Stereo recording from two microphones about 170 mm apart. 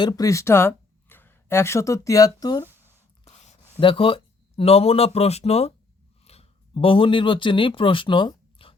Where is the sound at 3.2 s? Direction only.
40° left (ahead or behind).